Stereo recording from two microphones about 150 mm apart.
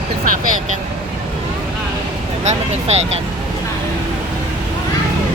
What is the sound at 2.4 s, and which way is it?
Speech, 45° right (ahead or behind).